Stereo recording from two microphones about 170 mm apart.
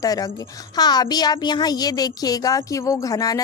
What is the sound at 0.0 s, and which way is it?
Speech, 20° left (ahead or behind).